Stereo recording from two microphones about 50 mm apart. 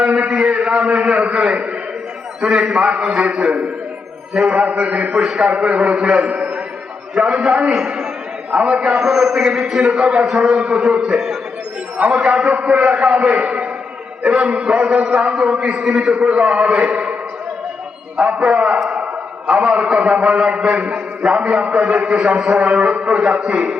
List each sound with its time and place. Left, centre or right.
0.1 s a sound: right
2.6 s a man's voice: centre
5.2 s a man's voice: centre
5.5 s a man's voice: right
7.7 s a man's voice: centre; by 17.2 s right
18.2 s a man's voice: centre